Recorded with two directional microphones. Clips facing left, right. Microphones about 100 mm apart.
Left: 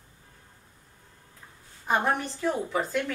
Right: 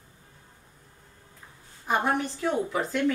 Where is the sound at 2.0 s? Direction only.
Centre (ahead or behind).